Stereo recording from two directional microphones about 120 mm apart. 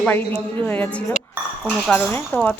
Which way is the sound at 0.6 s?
15° left (ahead or behind).